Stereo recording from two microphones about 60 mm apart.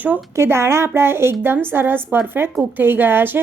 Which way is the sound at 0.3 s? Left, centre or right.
Right.